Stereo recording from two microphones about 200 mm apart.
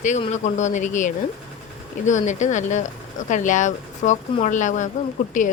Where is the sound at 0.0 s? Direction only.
35° left (ahead or behind).